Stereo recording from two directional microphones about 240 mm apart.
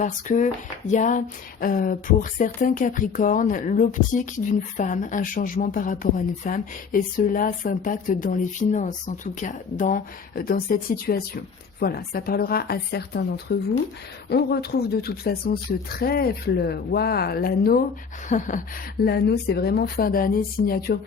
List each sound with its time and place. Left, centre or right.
0.0 s speech: left
19.0 s speech: left